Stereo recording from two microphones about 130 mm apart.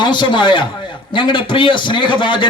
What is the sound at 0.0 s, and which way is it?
A man's voice, 35° left (ahead or behind).